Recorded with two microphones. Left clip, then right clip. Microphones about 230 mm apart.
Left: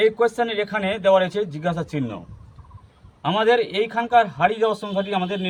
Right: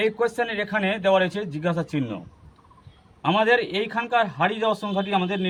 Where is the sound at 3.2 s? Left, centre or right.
Centre.